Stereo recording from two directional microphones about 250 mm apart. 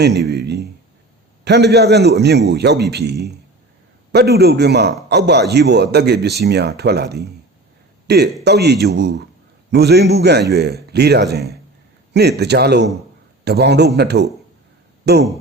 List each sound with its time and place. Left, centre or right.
0.0 s a man's voice: right